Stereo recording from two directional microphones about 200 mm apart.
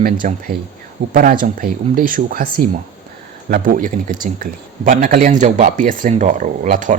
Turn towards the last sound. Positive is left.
turn(degrees=-40)  # may be behind; listen again after turning